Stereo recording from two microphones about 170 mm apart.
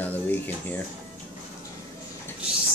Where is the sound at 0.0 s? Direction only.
10° left (ahead or behind).